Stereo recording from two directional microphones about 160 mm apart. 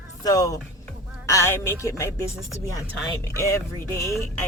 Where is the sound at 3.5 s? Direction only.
20° left (ahead or behind).